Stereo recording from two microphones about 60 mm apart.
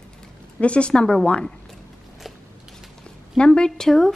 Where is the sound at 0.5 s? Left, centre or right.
Centre.